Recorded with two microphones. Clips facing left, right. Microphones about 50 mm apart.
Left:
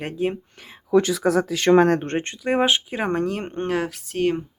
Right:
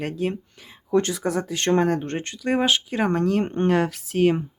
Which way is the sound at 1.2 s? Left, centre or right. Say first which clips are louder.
Left 5 dB; left.